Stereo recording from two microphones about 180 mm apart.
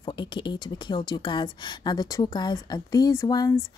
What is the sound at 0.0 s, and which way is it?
Speech, 25° left (ahead or behind).